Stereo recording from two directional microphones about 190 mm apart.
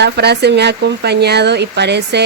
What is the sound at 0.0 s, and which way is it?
Speech, 60° right (ahead or behind).